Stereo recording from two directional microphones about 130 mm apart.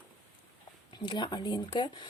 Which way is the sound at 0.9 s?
35° left (ahead or behind).